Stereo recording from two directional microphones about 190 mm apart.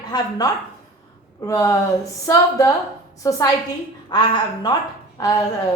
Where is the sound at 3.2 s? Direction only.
15° left (ahead or behind).